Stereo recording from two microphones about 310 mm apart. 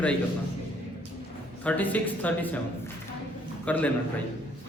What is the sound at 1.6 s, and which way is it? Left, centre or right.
A man's voice, centre.